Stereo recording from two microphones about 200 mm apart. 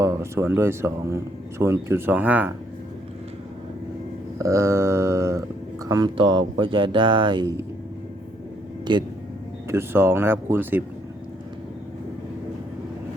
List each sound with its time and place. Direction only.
0.0 s speech: 15° right (ahead or behind)
4.4 s speech: 15° right (ahead or behind)
8.8 s vehicle: 20° right (ahead or behind)
9.6 s speech: 10° right (ahead or behind)